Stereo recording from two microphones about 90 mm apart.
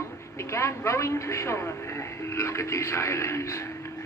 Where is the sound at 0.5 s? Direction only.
35° left (ahead or behind).